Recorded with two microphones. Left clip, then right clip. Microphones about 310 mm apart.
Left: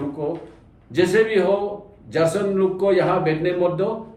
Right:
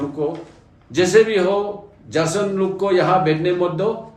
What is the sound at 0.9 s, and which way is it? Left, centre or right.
Speech, centre.